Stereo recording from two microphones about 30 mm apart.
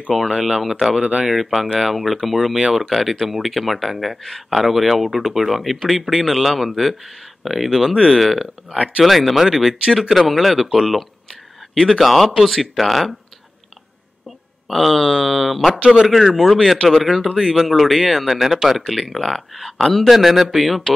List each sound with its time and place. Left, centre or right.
0.3 s speech: centre
0.9 s speech: right
1.3 s speech: centre
7.9 s speech: right
8.2 s speech: centre
8.7 s speech: right
9.0 s speech: centre
14.7 s speech: centre